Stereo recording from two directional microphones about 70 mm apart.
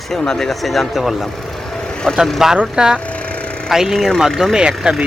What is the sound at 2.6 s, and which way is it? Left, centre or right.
Speech, centre.